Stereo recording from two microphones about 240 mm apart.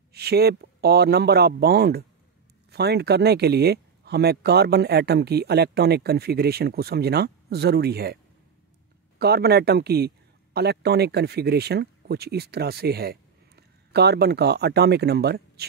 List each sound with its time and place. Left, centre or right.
0.1 s speech: right
9.2 s speech: right